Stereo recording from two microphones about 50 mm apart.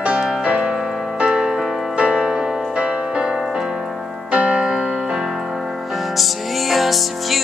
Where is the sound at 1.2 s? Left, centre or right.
Centre.